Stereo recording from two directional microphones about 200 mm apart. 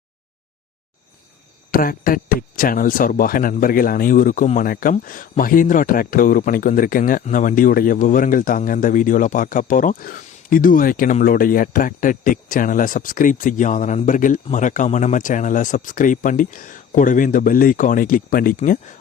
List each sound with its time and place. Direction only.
1.7 s speech: 45° left (ahead or behind)